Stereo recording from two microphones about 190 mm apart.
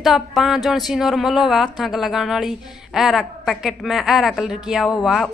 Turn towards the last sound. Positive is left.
turn(degrees=0)  # may be behind; listen again after turning